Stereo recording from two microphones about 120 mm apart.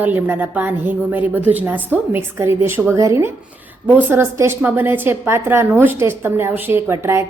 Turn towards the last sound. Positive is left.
turn(degrees=-20)  # may be behind; listen again after turning